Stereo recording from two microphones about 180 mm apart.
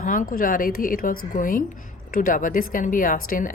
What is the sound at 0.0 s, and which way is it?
Speech, 50° left (ahead or behind).